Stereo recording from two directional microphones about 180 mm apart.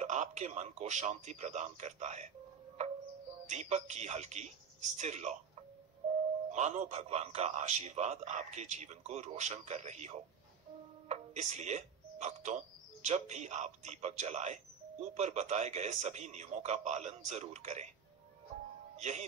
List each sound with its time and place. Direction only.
0.0 s a man's voice: 40° right (ahead or behind)
2.8 s music: 40° right (ahead or behind)
3.4 s a man's voice: 40° right (ahead or behind)
6.0 s music: 35° right (ahead or behind)
6.5 s a man's voice: 40° right (ahead or behind)
18.9 s speech: 40° right (ahead or behind)